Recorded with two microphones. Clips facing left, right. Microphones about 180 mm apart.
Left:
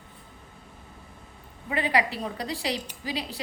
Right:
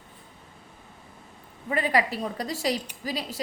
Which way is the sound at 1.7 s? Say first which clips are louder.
Right 1 dB; 45° right (ahead or behind).